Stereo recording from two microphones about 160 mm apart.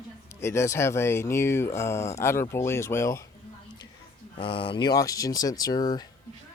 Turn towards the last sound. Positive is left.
turn(degrees=25)  # may be behind; listen again after turning